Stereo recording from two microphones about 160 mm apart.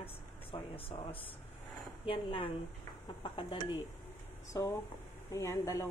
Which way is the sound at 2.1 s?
35° left (ahead or behind).